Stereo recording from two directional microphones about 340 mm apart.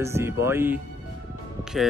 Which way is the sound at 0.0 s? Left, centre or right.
Centre.